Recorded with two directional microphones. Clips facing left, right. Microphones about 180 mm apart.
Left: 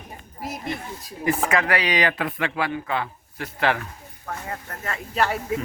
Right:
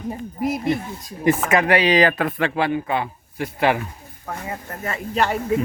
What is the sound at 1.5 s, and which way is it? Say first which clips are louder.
A man's voice: right 6 dB; 20° right (ahead or behind).